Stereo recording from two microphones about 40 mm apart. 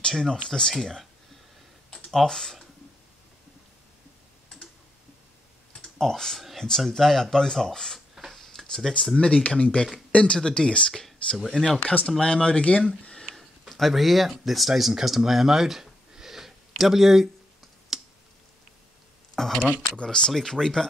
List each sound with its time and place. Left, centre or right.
0.1 s speech: centre
2.2 s speech: centre
5.9 s speech: centre
8.3 s tick-tock: centre
9.1 s speech: left
11.3 s speech: centre
11.8 s speech: left
12.2 s speech: left
13.3 s a sound: centre
14.3 s speech: centre
17.9 s clicking: centre
19.3 s speech: centre
20.0 s speech: left